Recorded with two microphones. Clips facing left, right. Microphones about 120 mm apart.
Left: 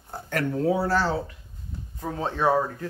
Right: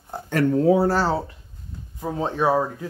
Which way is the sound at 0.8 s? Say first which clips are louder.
Right 4 dB; 35° right (ahead or behind).